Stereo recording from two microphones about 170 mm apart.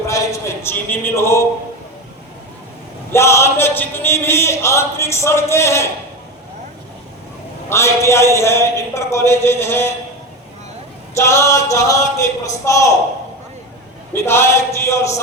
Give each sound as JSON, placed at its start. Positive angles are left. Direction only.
{"t": 0.1, "sound": "a man's voice", "side_deg": 15}
{"t": 3.1, "sound": "speech", "side_deg": 15}
{"t": 7.7, "sound": "speech", "side_deg": 15}
{"t": 11.1, "sound": "speech", "side_deg": 15}
{"t": 14.1, "sound": "speech", "side_deg": 15}